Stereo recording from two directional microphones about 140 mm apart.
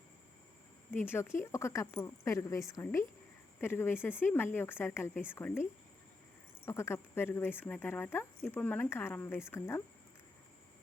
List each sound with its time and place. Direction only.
1.0 s a woman's voice: 15° left (ahead or behind)
6.7 s speech: 20° left (ahead or behind)